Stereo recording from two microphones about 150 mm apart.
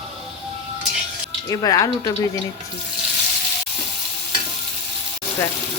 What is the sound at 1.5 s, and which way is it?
Speech, 20° left (ahead or behind).